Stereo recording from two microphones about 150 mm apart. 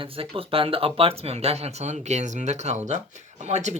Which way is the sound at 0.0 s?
40° right (ahead or behind).